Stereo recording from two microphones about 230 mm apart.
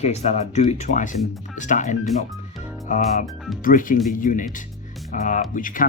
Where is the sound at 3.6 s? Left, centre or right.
Left.